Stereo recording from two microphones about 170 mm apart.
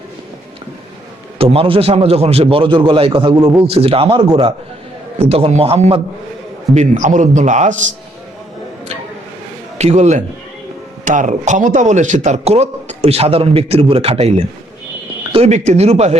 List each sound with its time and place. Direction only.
1.4 s speech: 35° right (ahead or behind)
6.7 s a man's voice: 45° right (ahead or behind)
9.7 s a man's voice: 40° right (ahead or behind)